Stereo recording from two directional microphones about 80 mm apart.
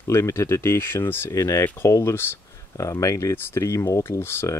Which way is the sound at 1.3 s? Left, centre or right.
Left.